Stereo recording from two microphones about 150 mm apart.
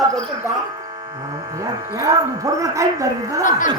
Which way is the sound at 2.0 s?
25° right (ahead or behind).